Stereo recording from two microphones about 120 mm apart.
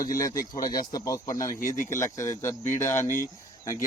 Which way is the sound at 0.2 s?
30° left (ahead or behind).